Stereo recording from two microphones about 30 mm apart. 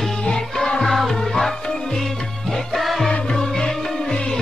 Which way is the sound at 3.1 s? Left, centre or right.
Left.